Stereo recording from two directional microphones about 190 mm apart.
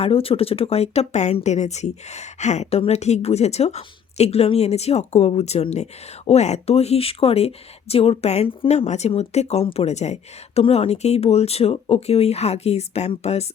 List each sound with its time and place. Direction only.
0.0 s speech: 30° left (ahead or behind)